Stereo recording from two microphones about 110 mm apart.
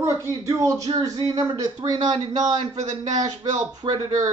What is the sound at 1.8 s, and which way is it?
A man's voice, 45° right (ahead or behind).